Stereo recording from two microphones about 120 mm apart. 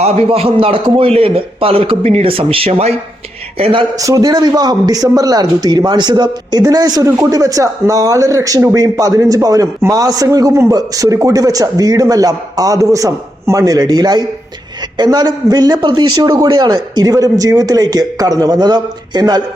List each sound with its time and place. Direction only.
0.0 s a man's voice: 55° right (ahead or behind)
3.9 s a man's voice: 30° right (ahead or behind)